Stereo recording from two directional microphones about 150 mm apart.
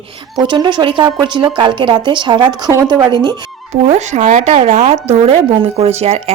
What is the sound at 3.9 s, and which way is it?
Speech, 50° right (ahead or behind).